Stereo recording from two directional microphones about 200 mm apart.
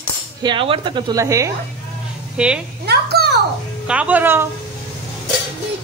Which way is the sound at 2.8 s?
55° right (ahead or behind).